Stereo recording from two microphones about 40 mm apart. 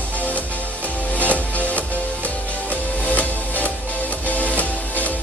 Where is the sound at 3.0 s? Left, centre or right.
Left.